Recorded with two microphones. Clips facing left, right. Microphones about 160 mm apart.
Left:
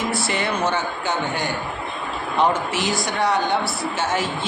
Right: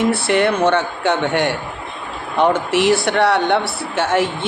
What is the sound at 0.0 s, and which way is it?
Speech, 65° right (ahead or behind).